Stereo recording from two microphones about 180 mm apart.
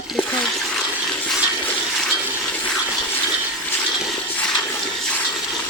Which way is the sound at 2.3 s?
10° left (ahead or behind).